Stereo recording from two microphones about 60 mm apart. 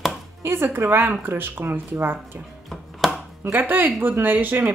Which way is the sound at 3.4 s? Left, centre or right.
Right.